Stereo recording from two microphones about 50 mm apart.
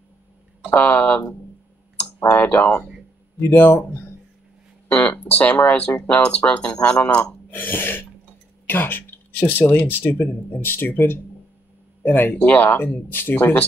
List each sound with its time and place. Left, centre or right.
0.7 s speech: left
2.3 s speech: left
3.3 s speech: left
4.9 s speech: left
7.0 s speech: left